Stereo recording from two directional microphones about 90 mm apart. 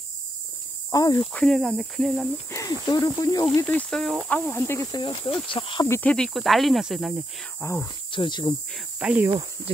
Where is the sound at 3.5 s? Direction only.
20° left (ahead or behind).